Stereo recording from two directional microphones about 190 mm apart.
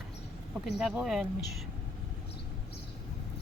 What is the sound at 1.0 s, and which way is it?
Speech, centre (ahead or behind).